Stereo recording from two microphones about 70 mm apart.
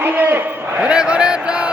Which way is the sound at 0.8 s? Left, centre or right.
Centre.